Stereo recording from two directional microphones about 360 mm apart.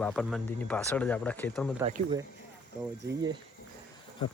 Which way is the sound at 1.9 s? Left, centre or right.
Centre.